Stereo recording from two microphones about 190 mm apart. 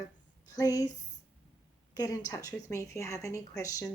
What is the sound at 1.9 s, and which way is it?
Speech, 15° left (ahead or behind).